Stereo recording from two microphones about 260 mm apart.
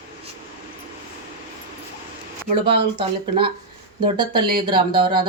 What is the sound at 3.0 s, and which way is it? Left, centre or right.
Speech, centre.